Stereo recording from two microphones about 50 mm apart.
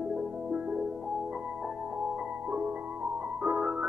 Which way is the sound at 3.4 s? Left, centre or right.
Centre.